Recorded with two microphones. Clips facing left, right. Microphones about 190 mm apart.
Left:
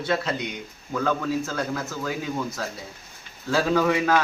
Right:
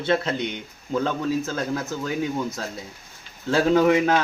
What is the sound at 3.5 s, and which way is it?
Speech, 20° right (ahead or behind).